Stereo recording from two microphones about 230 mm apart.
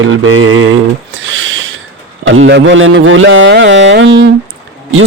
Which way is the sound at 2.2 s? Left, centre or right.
Right.